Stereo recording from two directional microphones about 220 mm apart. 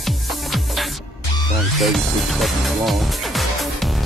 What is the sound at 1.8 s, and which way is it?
Speech, centre (ahead or behind).